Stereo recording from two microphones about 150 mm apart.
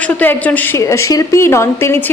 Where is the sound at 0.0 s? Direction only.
10° left (ahead or behind).